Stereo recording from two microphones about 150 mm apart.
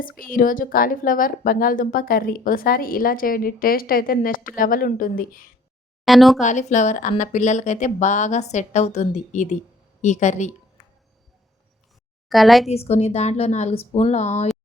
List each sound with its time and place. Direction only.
0.0 s a woman's voice: 65° left (ahead or behind)
6.1 s speech: centre (ahead or behind)
6.4 s a woman's voice: 55° left (ahead or behind)
12.3 s speech: centre (ahead or behind)
12.6 s a woman's voice: 45° left (ahead or behind)